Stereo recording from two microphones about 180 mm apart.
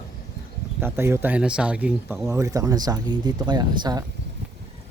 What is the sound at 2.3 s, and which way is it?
Speech, 15° right (ahead or behind).